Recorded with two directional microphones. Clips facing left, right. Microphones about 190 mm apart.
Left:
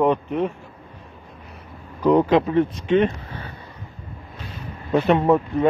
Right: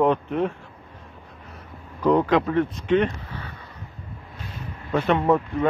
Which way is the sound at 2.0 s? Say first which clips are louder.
Left 3 dB; 20° left (ahead or behind).